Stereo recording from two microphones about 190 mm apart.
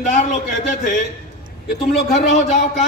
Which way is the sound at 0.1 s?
40° left (ahead or behind).